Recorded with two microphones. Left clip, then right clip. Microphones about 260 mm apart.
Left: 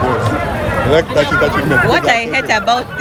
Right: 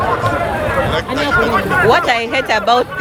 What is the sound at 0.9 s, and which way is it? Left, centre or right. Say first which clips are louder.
Speech: left 4 dB; left.